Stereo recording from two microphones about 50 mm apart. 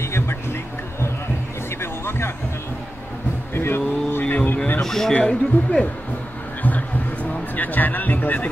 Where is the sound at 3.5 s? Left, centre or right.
Left.